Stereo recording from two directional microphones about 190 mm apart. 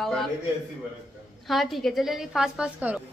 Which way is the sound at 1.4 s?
Centre (ahead or behind).